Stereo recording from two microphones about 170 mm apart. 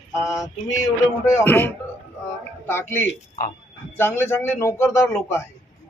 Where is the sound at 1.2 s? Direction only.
15° left (ahead or behind).